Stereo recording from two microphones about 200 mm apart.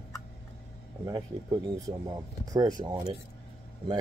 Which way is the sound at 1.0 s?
20° right (ahead or behind).